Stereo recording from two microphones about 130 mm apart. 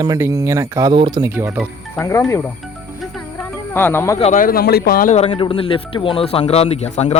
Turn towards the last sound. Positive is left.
turn(degrees=55)  # may be behind; listen again after turning